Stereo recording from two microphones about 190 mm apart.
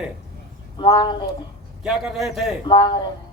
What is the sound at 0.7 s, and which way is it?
Chicken, 25° left (ahead or behind).